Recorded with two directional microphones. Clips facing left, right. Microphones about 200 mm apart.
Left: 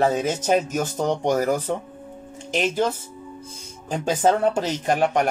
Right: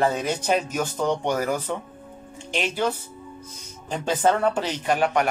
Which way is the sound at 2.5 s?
45° left (ahead or behind).